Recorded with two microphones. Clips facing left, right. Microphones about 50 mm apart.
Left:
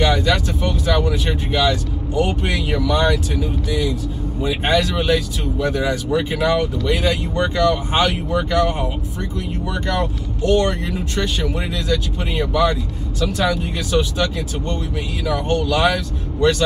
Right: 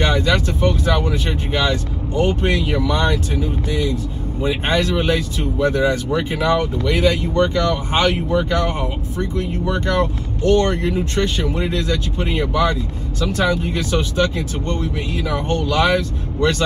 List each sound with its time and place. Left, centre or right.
0.0 s speech: right
7.3 s speech: left
7.6 s speech: right